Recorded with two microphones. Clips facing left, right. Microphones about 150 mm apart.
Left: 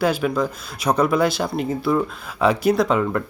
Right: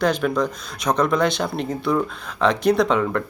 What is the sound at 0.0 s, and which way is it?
Speech, 5° left (ahead or behind).